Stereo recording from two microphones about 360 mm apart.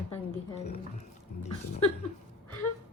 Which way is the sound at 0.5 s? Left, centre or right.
Centre.